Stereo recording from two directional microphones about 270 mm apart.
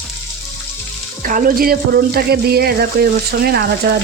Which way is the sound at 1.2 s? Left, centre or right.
Right.